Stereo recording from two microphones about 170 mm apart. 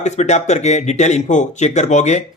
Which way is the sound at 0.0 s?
40° left (ahead or behind).